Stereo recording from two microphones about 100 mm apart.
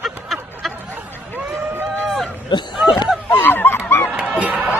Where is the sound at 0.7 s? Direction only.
20° right (ahead or behind).